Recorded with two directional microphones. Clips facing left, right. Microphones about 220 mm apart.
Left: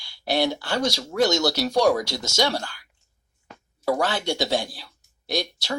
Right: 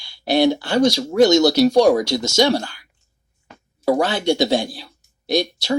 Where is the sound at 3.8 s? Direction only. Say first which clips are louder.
Right 6 dB; 20° right (ahead or behind).